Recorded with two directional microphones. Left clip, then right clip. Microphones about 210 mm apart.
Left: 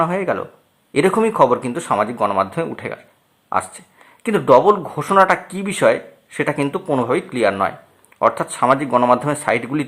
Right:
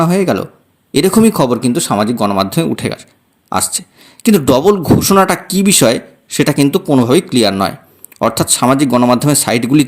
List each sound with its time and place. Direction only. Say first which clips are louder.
0.0 s speech: right 5 dB; 50° right (ahead or behind)